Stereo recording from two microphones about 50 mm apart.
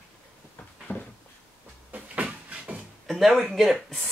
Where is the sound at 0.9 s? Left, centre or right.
Left.